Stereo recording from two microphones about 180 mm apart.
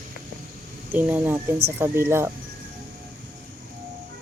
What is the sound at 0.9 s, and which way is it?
Speech, 10° right (ahead or behind).